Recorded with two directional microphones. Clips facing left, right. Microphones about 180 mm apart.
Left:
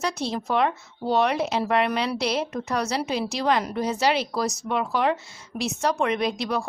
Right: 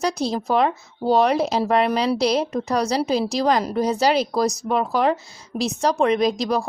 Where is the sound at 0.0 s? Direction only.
35° right (ahead or behind).